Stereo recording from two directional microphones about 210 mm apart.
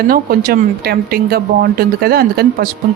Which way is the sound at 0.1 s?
45° right (ahead or behind).